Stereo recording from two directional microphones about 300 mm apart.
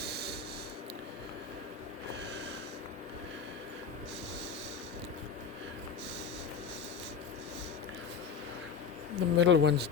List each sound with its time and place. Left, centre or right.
0.0 s snort: right
9.1 s speech: right